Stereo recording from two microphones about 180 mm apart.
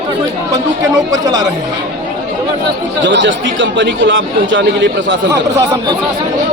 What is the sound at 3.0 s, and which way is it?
Speech, 85° right.